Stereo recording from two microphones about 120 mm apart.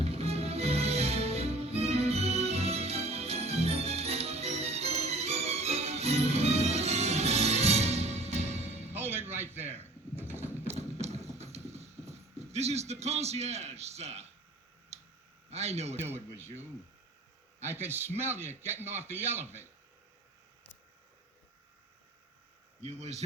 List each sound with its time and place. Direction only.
0.0 s music: 60° right (ahead or behind)
9.0 s music: 20° right (ahead or behind)
10.2 s a sound: 20° right (ahead or behind)
10.8 s clip-clop: 60° right (ahead or behind)
15.4 s a man's voice: 60° right (ahead or behind)
16.0 s a man's voice: 20° right (ahead or behind)
17.7 s a man's voice: 20° right (ahead or behind)
22.8 s speech: 65° right (ahead or behind)